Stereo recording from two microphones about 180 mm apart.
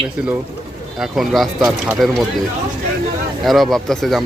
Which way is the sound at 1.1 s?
Centre (ahead or behind).